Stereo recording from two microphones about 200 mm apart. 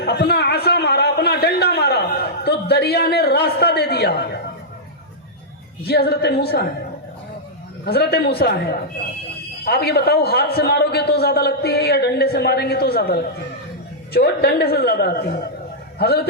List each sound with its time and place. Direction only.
0.0 s a sound: 55° left (ahead or behind)
5.8 s a man's voice: 50° left (ahead or behind)
7.9 s a man's voice: 50° left (ahead or behind)